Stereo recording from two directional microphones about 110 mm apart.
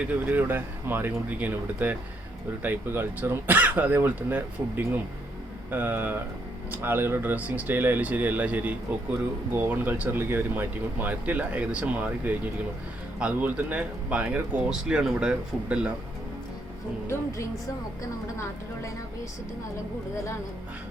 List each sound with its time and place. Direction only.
0.3 s speech: 20° right (ahead or behind)